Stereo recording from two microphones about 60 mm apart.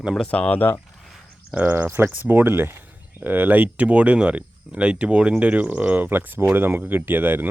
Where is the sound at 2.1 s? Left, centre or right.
Right.